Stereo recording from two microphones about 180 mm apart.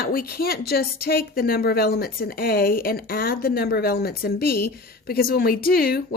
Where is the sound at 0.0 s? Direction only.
55° left (ahead or behind).